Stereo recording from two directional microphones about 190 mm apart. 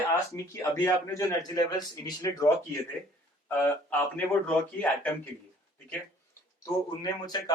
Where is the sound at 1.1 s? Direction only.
20° left (ahead or behind).